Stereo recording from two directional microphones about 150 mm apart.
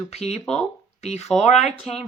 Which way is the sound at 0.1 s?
45° left (ahead or behind).